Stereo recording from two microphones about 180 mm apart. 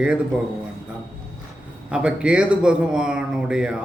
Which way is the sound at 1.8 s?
5° right (ahead or behind).